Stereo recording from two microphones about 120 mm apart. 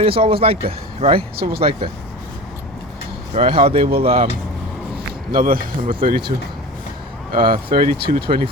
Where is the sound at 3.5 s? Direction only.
50° right (ahead or behind).